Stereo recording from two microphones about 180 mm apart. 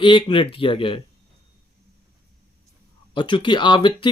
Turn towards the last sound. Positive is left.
turn(degrees=25)  # may be behind; listen again after turning